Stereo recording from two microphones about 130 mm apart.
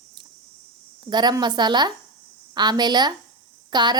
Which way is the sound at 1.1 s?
35° right (ahead or behind).